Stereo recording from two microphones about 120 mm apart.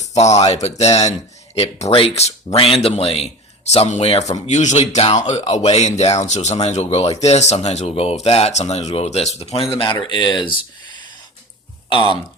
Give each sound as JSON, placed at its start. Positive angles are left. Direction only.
{"t": 0.0, "sound": "speech", "side_deg": 70}
{"t": 11.9, "sound": "speech", "side_deg": 45}